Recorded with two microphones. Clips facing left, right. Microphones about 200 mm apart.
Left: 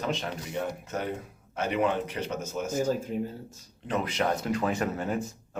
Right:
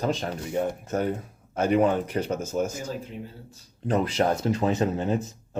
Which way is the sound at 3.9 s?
35° right (ahead or behind).